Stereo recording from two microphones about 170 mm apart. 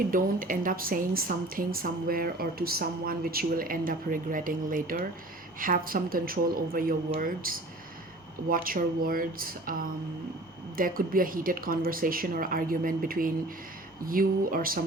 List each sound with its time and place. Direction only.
0.1 s speech: 55° right (ahead or behind)